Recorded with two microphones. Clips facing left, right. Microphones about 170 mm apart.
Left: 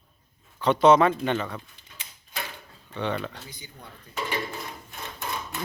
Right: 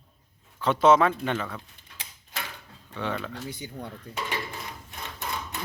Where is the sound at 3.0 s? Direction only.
Centre (ahead or behind).